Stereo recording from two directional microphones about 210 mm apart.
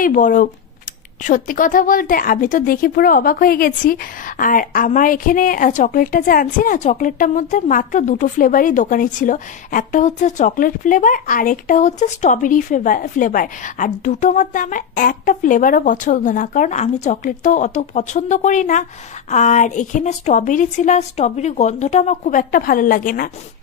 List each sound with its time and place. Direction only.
0.0 s a woman's voice: 40° left (ahead or behind)